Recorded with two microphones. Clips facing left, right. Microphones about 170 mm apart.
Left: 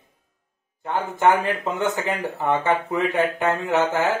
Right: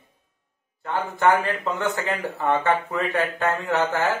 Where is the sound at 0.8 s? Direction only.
15° left (ahead or behind).